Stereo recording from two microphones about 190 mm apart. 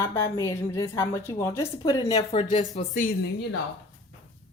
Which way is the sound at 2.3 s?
35° left (ahead or behind).